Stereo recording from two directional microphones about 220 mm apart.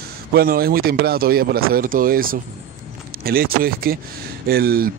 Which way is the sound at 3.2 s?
40° right (ahead or behind).